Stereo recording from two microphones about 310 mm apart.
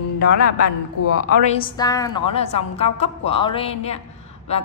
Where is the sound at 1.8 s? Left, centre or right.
Centre.